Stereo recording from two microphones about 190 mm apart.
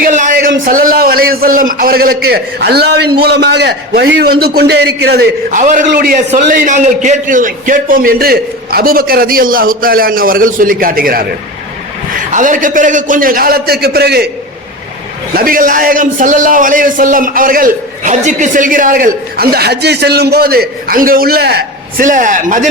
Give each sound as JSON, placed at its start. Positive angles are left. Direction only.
{"t": 0.0, "sound": "a sound", "side_deg": -40}
{"t": 0.6, "sound": "a man's voice", "side_deg": -45}
{"t": 5.5, "sound": "a man's voice", "side_deg": -40}
{"t": 12.3, "sound": "a man's voice", "side_deg": -45}
{"t": 15.4, "sound": "a man's voice", "side_deg": -50}